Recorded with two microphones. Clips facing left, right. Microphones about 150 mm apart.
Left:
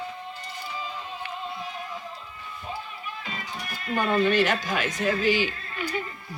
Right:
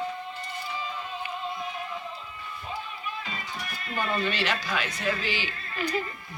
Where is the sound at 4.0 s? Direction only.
50° left (ahead or behind).